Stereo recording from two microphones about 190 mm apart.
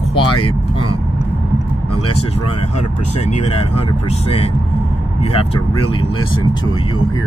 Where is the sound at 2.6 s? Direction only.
40° left (ahead or behind).